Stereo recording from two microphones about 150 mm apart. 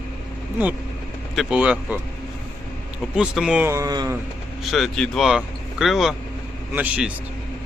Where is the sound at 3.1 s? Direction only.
5° right (ahead or behind).